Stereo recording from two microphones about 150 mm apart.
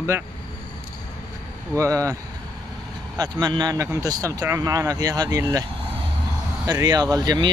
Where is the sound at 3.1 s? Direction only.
30° right (ahead or behind).